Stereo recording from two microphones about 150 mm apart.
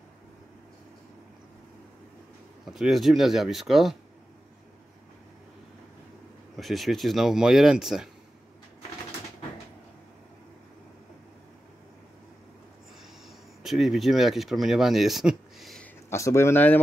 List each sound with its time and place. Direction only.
2.6 s speech: centre (ahead or behind)
6.5 s speech: centre (ahead or behind)
13.6 s speech: centre (ahead or behind)
16.1 s speech: 20° left (ahead or behind)